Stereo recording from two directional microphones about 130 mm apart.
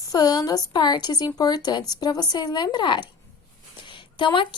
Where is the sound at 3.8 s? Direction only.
40° left (ahead or behind).